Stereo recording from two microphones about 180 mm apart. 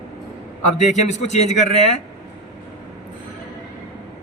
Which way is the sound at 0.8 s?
40° left (ahead or behind).